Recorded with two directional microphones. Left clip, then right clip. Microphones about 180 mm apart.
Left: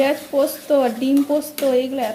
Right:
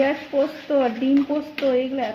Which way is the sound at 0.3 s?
15° left (ahead or behind).